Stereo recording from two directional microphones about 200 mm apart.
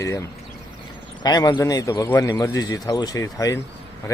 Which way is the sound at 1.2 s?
20° left (ahead or behind).